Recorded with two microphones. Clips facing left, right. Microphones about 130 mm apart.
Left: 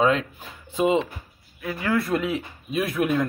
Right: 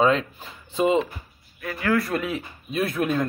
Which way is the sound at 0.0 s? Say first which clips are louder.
Right 1 dB; 5° left (ahead or behind).